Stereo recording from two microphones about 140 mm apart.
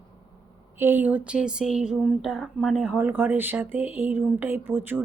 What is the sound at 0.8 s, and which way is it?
Speech, 15° right (ahead or behind).